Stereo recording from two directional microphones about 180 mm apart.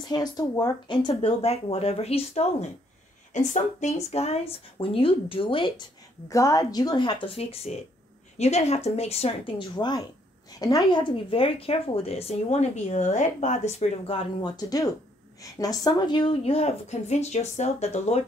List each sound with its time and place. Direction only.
0.1 s speech: 20° left (ahead or behind); by 18.2 s 35° left (ahead or behind)